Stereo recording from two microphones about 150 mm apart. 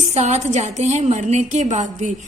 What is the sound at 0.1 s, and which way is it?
A woman's voice, 50° right (ahead or behind).